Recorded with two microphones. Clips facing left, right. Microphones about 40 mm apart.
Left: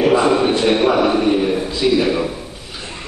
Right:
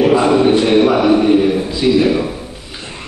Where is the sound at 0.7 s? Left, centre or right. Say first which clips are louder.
Right 3 dB; centre.